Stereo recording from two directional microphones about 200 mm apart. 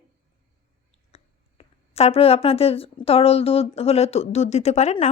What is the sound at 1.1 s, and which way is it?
A woman's voice, 30° left (ahead or behind).